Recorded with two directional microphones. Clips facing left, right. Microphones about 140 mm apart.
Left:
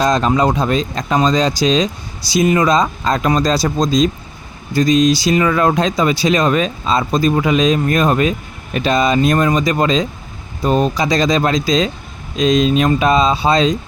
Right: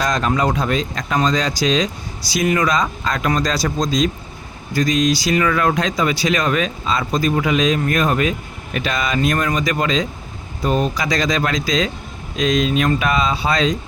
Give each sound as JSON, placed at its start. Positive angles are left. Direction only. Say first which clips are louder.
{"t": 0.0, "sound": "speech", "louder": "left 5 dB", "side_deg": 25}